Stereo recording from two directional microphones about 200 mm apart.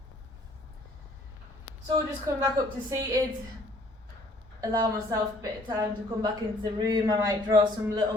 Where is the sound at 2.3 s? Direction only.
15° right (ahead or behind).